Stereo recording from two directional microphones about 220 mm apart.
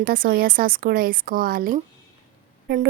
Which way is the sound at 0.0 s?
40° right (ahead or behind).